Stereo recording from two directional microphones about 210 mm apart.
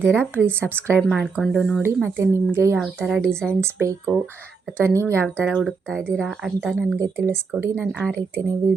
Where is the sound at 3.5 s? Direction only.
10° right (ahead or behind).